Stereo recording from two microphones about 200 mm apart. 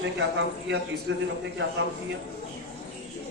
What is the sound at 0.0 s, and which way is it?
A man's voice, 65° right (ahead or behind).